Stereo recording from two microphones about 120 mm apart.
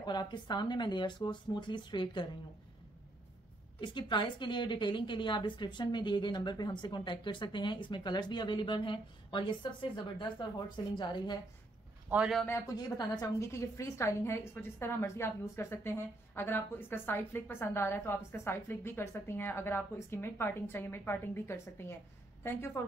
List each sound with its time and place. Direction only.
0.0 s a woman's voice: 35° left (ahead or behind)
3.8 s a woman's voice: 40° left (ahead or behind)
12.6 s a woman's voice: 35° left (ahead or behind)